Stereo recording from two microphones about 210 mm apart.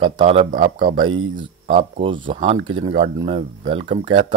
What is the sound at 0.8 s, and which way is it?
Speech, 20° right (ahead or behind).